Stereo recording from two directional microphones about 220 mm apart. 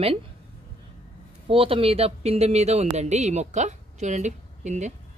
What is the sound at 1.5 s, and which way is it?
Speech, 25° right (ahead or behind).